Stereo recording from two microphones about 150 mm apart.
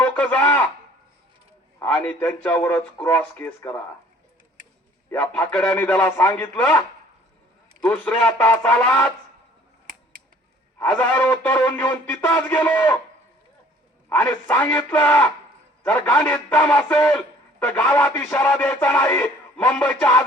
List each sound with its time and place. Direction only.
0.0 s a sound: 10° left (ahead or behind)
1.8 s music: 10° left (ahead or behind)
5.1 s music: 10° left (ahead or behind)
10.8 s music: 10° left (ahead or behind)
14.4 s music: 10° left (ahead or behind)
15.8 s a man's voice: 10° left (ahead or behind)
16.5 s music: 10° left (ahead or behind)